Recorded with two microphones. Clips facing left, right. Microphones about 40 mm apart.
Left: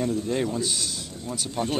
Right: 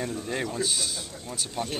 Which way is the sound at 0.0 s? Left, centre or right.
Centre.